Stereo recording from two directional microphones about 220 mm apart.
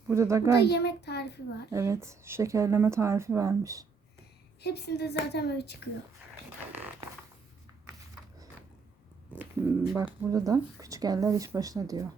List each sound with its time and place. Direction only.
0.1 s speech: 15° right (ahead or behind)
0.6 s a woman's voice: 50° left (ahead or behind)
1.7 s speech: 10° right (ahead or behind)
4.6 s a woman's voice: 45° left (ahead or behind)
9.4 s speech: centre (ahead or behind)
10.3 s speech: 15° right (ahead or behind)